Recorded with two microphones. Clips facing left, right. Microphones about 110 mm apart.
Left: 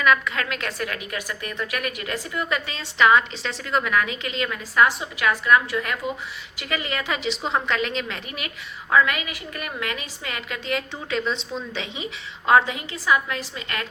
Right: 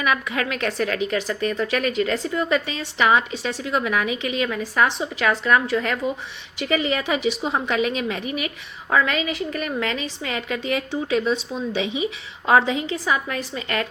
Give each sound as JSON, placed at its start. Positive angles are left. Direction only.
{"t": 0.0, "sound": "a woman's voice", "side_deg": -20}
{"t": 5.2, "sound": "a woman's voice", "side_deg": -30}